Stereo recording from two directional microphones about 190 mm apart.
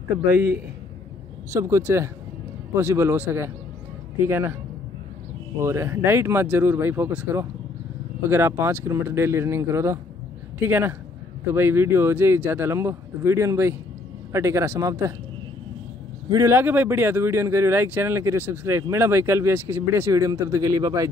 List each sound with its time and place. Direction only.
0.3 s speech: 10° right (ahead or behind)
5.6 s speech: 15° right (ahead or behind)
16.3 s speech: 15° right (ahead or behind)